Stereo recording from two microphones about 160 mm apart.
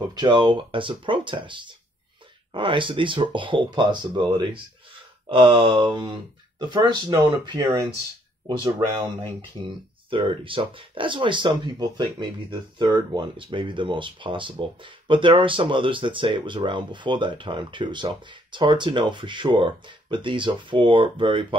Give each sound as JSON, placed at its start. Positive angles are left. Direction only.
{"t": 0.1, "sound": "speech", "side_deg": -25}
{"t": 5.3, "sound": "speech", "side_deg": -30}